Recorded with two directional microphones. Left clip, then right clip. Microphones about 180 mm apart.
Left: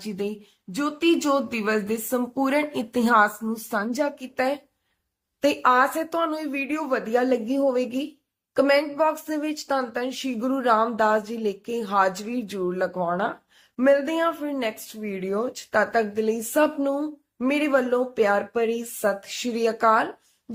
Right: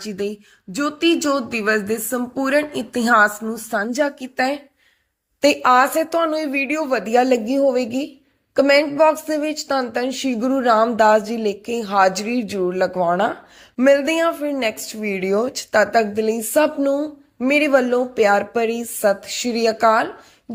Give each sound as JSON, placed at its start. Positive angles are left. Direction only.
{"t": 0.0, "sound": "speech", "side_deg": -15}